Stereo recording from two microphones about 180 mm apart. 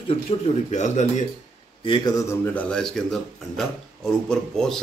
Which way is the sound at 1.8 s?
25° left (ahead or behind).